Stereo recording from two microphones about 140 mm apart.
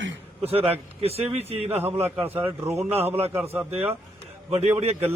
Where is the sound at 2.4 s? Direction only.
15° right (ahead or behind).